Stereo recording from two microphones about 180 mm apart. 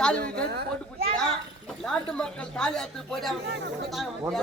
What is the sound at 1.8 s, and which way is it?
A man's voice, 5° left (ahead or behind).